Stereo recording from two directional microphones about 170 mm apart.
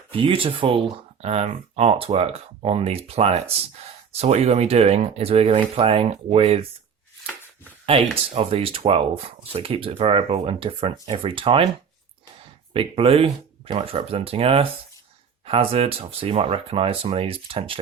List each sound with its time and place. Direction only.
0.1 s speech: 30° right (ahead or behind)
8.1 s speech: 35° right (ahead or behind)
12.7 s speech: 35° right (ahead or behind)